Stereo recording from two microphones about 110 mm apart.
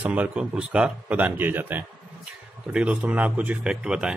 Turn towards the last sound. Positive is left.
turn(degrees=-5)  # may be behind; listen again after turning